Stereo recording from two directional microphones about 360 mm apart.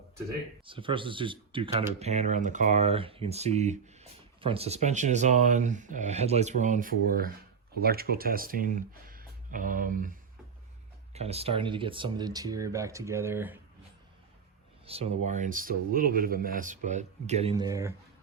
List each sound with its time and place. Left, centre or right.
0.6 s speech: centre
14.8 s speech: centre